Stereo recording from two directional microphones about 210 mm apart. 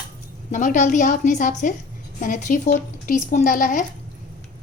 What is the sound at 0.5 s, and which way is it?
Speech, 35° left (ahead or behind).